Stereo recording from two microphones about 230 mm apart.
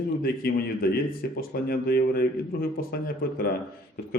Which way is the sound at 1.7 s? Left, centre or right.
Left.